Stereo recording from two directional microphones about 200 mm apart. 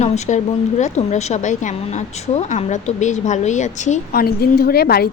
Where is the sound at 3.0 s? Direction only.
35° left (ahead or behind).